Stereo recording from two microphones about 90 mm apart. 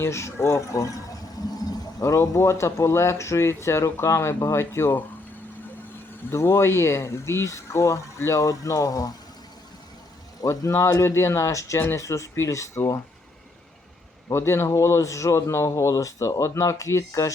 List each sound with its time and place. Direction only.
0.0 s a man's voice: 30° left (ahead or behind)
2.0 s a man's voice: 35° left (ahead or behind)
6.3 s a man's voice: 30° left (ahead or behind)
10.4 s a man's voice: 35° left (ahead or behind)
14.3 s a man's voice: 30° left (ahead or behind)